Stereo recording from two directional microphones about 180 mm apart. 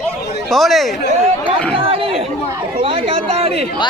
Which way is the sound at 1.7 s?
30° right (ahead or behind).